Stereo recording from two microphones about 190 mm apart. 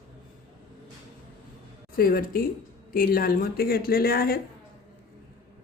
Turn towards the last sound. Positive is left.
turn(degrees=50)  # may be behind; listen again after turning